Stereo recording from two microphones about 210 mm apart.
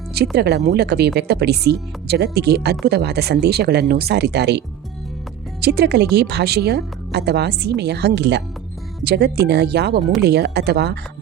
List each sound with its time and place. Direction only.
0.1 s speech: 50° right (ahead or behind)